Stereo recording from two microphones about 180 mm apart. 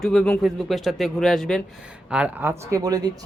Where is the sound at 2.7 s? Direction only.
20° right (ahead or behind).